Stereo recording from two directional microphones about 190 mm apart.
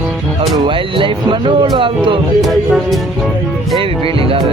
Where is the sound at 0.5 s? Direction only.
25° right (ahead or behind).